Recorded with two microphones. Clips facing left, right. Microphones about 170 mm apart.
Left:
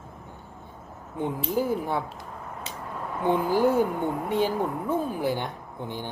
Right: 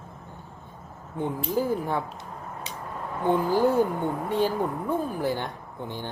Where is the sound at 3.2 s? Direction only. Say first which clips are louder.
Even; 15° left (ahead or behind).